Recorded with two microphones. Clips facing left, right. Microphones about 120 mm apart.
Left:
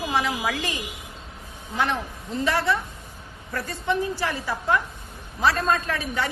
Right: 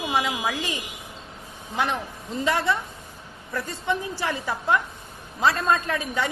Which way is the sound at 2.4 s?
20° right (ahead or behind).